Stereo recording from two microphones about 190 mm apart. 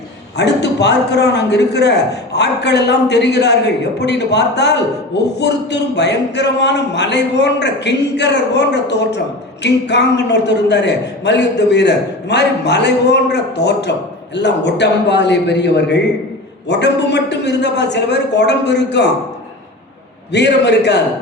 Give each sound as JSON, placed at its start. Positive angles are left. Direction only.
{"t": 0.3, "sound": "a man's voice", "side_deg": 65}
{"t": 20.3, "sound": "a man's voice", "side_deg": 65}